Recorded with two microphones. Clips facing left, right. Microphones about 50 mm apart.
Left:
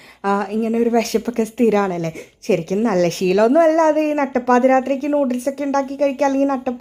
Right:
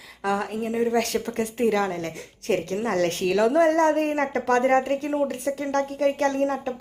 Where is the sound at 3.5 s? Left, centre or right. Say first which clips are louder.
Left 6 dB; left.